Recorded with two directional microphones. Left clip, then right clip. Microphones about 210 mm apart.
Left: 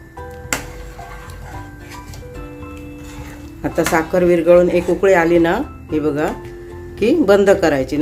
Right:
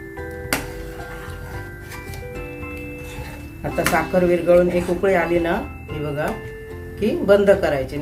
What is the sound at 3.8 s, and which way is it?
Speech, 50° left (ahead or behind).